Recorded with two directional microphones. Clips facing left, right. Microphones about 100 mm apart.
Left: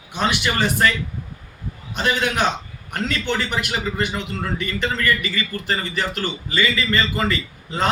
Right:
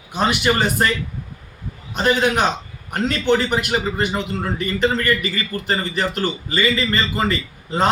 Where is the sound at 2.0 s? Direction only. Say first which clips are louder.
Right 4 dB; 35° right (ahead or behind).